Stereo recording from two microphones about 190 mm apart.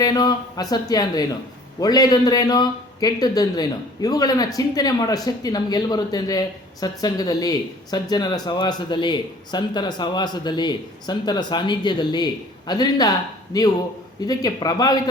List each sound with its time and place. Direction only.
0.0 s a man's voice: 20° left (ahead or behind)